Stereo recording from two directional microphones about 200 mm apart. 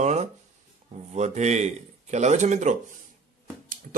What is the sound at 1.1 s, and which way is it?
Speech, 35° right (ahead or behind).